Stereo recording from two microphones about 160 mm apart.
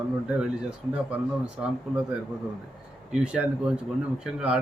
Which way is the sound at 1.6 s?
5° right (ahead or behind).